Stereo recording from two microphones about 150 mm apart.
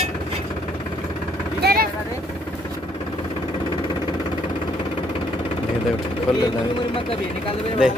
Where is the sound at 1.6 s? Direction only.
90° right.